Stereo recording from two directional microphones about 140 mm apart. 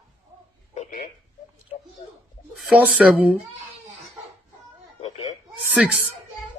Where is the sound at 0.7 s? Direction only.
55° left (ahead or behind).